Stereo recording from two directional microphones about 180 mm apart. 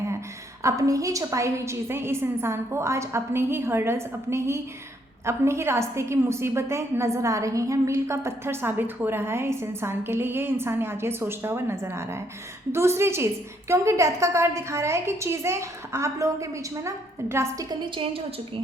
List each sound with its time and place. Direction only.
0.6 s a woman's voice: 20° right (ahead or behind)